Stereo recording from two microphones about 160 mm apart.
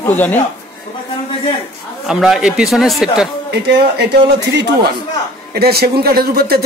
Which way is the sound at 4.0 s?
90° right.